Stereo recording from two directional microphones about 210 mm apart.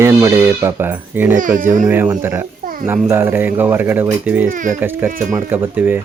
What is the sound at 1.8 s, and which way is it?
Speech, 10° right (ahead or behind).